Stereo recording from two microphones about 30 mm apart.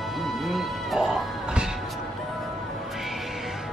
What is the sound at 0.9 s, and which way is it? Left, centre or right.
Music, centre.